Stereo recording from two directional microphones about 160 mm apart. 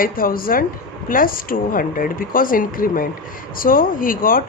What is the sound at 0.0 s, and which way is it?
Speech, 65° left (ahead or behind).